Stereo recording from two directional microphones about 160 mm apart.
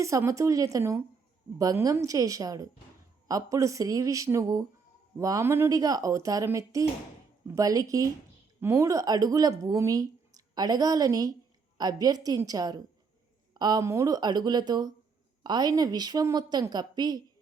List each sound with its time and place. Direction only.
0.0 s a woman's voice: 20° right (ahead or behind)